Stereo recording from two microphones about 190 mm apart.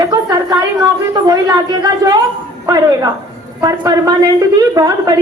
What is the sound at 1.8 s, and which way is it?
A woman's voice, 20° right (ahead or behind).